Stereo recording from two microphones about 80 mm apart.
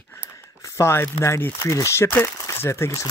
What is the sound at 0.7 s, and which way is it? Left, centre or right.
Speech, left.